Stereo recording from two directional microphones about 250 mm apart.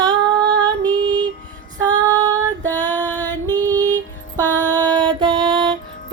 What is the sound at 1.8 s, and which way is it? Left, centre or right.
Female singing, centre.